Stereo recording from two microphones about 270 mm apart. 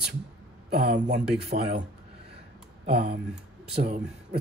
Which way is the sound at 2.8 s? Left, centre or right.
Right.